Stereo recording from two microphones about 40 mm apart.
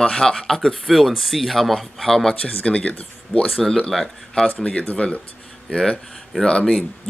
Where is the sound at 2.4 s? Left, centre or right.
Left.